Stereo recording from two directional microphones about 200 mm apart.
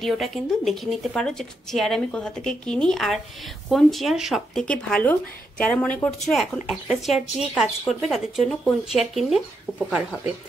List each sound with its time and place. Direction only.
0.0 s speech: centre (ahead or behind)